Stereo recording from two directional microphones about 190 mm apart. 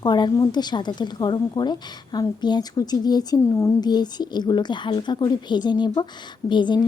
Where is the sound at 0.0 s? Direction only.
20° left (ahead or behind).